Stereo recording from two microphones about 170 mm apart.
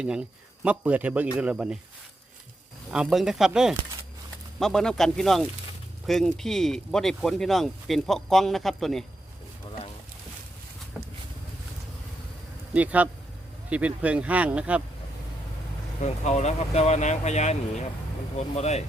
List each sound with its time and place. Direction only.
0.0 s a man's voice: 5° right (ahead or behind)
2.9 s speech: 5° right (ahead or behind)
12.7 s a man's voice: 10° right (ahead or behind)
16.0 s speech: 40° left (ahead or behind)